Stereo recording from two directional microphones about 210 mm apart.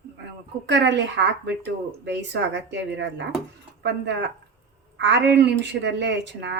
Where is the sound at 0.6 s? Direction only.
55° right (ahead or behind).